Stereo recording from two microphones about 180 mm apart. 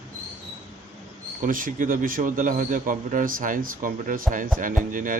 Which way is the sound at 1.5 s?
50° right (ahead or behind).